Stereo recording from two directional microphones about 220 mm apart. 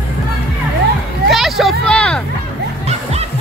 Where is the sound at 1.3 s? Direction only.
Centre (ahead or behind).